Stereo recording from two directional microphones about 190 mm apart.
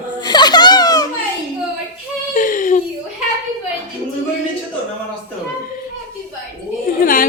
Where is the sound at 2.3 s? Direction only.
45° left (ahead or behind).